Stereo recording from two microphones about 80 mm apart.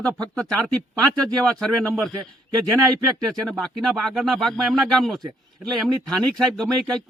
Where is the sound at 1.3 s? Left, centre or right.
Centre.